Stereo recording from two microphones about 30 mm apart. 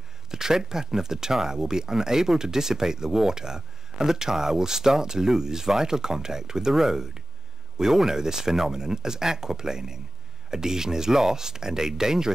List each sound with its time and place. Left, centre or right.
0.3 s speech: centre